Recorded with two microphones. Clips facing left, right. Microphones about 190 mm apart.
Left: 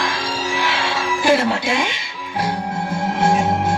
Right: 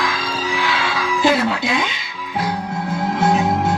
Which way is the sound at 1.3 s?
25° left (ahead or behind).